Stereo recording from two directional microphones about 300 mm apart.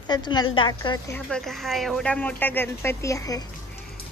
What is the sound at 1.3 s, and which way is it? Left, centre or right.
A child's voice, centre.